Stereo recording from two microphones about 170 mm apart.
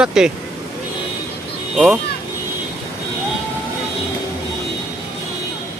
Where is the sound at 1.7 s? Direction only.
Centre (ahead or behind).